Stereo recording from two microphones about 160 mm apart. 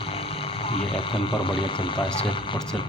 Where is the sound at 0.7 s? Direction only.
35° left (ahead or behind).